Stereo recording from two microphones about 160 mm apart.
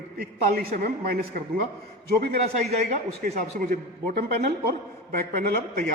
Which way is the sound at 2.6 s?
45° right (ahead or behind).